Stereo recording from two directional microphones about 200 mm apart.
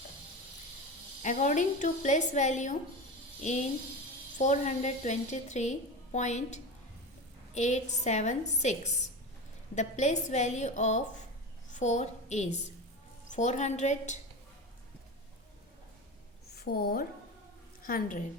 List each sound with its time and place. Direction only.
1.2 s a woman's voice: 40° left (ahead or behind)
4.4 s a woman's voice: 40° left (ahead or behind)
16.6 s a woman's voice: 50° left (ahead or behind)